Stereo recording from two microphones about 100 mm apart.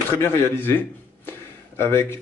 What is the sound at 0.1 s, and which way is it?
Speech, 25° left (ahead or behind).